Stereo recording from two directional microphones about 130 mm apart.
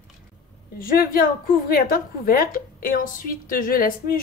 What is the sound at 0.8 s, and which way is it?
Speech, 90° left.